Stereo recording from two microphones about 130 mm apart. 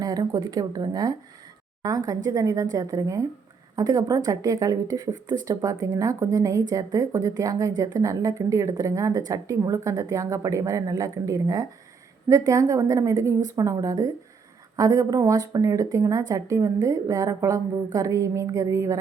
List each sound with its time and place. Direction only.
0.0 s a woman's voice: 30° right (ahead or behind)